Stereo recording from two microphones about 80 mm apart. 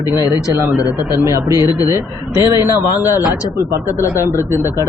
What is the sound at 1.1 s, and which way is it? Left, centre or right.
Speech, right.